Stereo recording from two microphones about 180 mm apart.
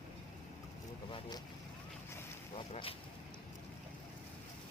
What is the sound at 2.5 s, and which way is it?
Speech, 30° left (ahead or behind).